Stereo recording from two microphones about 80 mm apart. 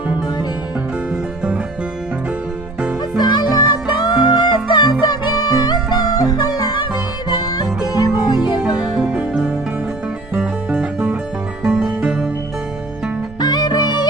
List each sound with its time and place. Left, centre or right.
1.1 s music: centre
3.2 s music: left
8.6 s music: centre
13.4 s music: left